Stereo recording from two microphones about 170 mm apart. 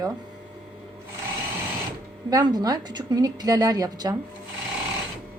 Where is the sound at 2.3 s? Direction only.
25° right (ahead or behind).